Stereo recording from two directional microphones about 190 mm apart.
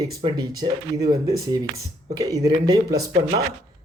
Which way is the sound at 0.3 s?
20° right (ahead or behind).